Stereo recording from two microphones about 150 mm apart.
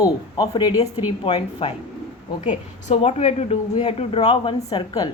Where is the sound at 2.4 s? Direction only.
45° left (ahead or behind).